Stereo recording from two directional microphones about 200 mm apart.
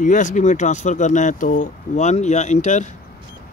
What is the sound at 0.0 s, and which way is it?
Speech, 40° left (ahead or behind).